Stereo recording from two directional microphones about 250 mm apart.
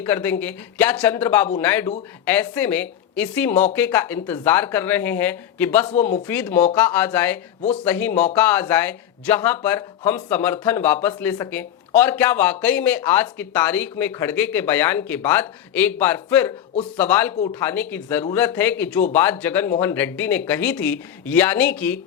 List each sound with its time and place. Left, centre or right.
0.0 s speech: centre